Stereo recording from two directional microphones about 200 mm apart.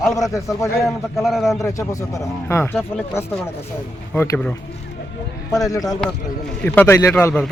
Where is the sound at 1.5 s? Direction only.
15° left (ahead or behind).